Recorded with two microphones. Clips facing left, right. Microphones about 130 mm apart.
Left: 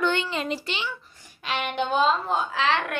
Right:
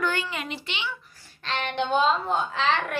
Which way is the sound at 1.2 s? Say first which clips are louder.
Left 1 dB; 10° left (ahead or behind).